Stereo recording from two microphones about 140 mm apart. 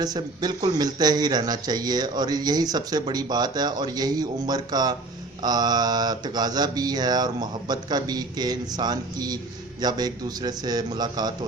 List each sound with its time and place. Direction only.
0.0 s speech: 30° right (ahead or behind)